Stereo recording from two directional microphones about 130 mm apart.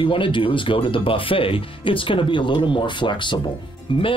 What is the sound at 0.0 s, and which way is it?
Speech, 40° left (ahead or behind).